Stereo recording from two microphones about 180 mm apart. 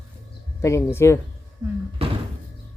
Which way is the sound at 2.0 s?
35° right (ahead or behind).